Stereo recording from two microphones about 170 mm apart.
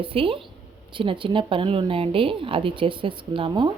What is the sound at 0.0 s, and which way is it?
Speech, 30° right (ahead or behind).